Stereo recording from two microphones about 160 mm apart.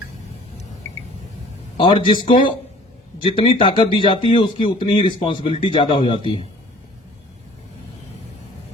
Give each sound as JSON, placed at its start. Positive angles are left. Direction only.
{"t": 1.8, "sound": "speech", "side_deg": 30}